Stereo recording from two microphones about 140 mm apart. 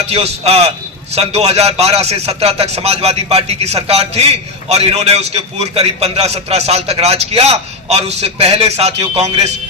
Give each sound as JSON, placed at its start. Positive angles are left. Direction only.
{"t": 0.1, "sound": "a man's voice", "side_deg": -45}